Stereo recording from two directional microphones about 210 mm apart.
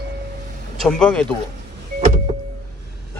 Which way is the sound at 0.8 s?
5° left (ahead or behind).